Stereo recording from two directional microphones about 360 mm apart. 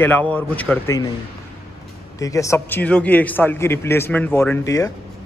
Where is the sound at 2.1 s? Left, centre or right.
Centre.